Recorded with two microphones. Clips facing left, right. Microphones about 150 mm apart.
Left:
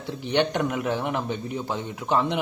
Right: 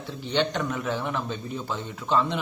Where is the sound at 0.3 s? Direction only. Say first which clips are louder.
Left 3 dB; 15° left (ahead or behind).